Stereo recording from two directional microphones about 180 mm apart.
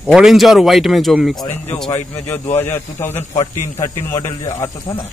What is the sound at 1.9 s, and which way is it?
Speech, 20° left (ahead or behind).